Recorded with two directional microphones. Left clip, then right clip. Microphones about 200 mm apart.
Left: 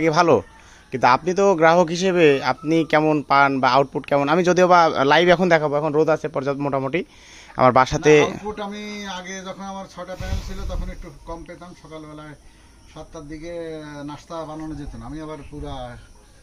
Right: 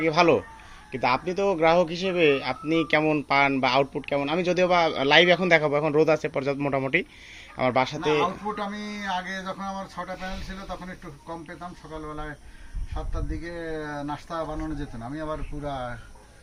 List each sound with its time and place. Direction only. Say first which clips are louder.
0.0 s speech: left 4 dB; 35° left (ahead or behind)
4.2 s a man's voice: left 7 dB; 40° left (ahead or behind); by 7.1 s 15° left (ahead or behind)
7.5 s speech: left 9 dB; 35° left (ahead or behind)
8.5 s speech: left 2 dB; centre (ahead or behind)
13.6 s speech: right 2 dB; 5° right (ahead or behind)